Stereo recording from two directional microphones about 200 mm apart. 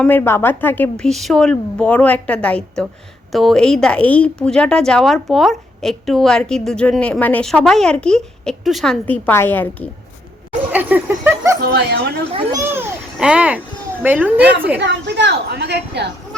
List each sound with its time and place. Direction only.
0.0 s a woman's voice: 10° left (ahead or behind)
10.7 s a child's voice: 10° right (ahead or behind)
11.6 s a woman's voice: 55° right (ahead or behind)
12.5 s a child's voice: 15° right (ahead or behind)
14.4 s a woman's voice: 55° right (ahead or behind)